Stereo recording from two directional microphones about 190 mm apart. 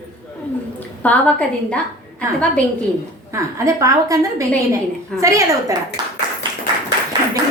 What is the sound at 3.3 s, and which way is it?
A woman's voice, 15° right (ahead or behind).